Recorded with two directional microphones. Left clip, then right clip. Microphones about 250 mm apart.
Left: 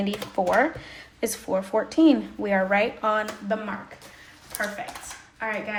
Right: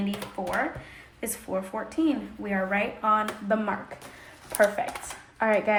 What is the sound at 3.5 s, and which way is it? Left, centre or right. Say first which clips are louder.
Speech: right 2 dB; centre.